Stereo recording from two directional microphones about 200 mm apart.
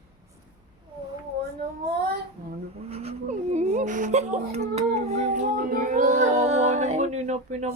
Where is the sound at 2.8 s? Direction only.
30° right (ahead or behind).